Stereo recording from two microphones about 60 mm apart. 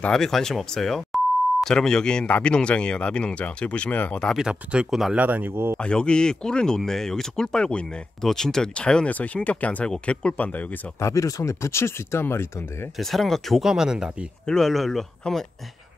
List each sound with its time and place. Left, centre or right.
0.1 s speech: centre
4.4 s speech: centre
5.1 s speech: right
5.8 s speech: centre
11.0 s speech: left
12.9 s speech: centre
13.7 s speech: centre
14.4 s speech: centre